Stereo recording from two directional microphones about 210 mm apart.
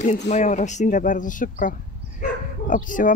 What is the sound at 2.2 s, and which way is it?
Bow-wow, 40° left (ahead or behind).